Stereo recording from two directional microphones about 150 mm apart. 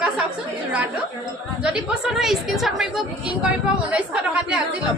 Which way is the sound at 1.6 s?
5° right (ahead or behind).